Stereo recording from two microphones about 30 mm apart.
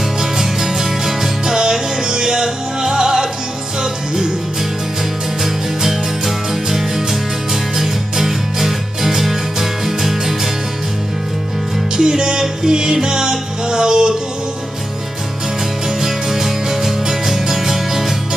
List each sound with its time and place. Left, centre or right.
0.2 s music: centre
1.5 s music: right
5.4 s music: centre
12.0 s music: right
16.0 s music: centre